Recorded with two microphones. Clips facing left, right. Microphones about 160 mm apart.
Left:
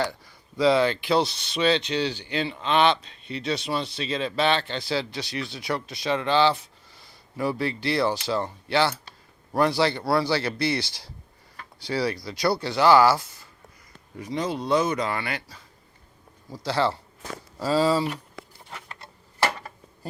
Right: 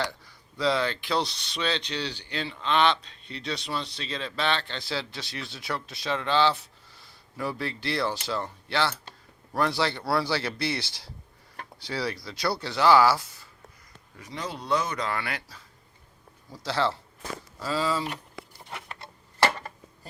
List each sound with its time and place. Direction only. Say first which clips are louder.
0.6 s speech: left 6 dB; 15° left (ahead or behind); by 13.2 s centre (ahead or behind)
14.3 s speech: left 5 dB; 15° left (ahead or behind)
14.9 s speech: left 3 dB; 5° left (ahead or behind)
16.6 s speech: left 3 dB; centre (ahead or behind)
17.6 s speech: left 7 dB; 35° left (ahead or behind)
18.7 s a sound: right 2 dB; centre (ahead or behind)